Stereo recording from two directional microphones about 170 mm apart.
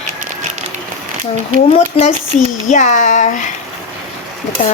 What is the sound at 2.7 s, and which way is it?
Speech, 45° left (ahead or behind).